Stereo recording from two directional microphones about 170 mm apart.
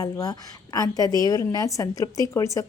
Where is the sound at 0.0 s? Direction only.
20° left (ahead or behind).